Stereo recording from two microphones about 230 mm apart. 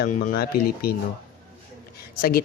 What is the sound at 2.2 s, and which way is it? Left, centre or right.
Speech, left.